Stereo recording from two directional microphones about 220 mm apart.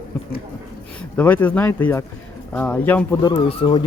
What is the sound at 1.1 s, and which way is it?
Speech, 5° left (ahead or behind).